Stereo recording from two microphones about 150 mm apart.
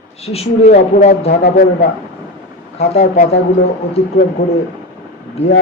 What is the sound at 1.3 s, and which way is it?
Speech, 90° left.